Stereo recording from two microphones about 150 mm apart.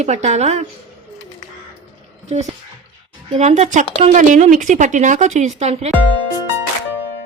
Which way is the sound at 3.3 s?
50° right (ahead or behind).